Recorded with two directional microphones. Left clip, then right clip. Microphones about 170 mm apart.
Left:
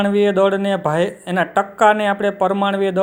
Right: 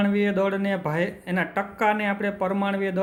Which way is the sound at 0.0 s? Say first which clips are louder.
Left 9 dB; 30° left (ahead or behind).